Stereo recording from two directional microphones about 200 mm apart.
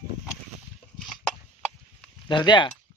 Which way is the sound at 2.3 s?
25° left (ahead or behind).